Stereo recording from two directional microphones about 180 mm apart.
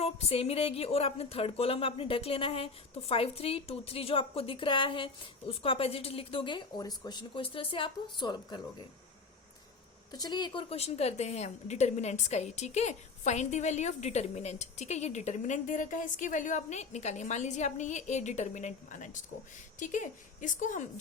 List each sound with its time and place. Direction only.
0.0 s a woman's voice: 35° left (ahead or behind)
10.1 s a woman's voice: 20° left (ahead or behind); by 20.8 s 45° left (ahead or behind)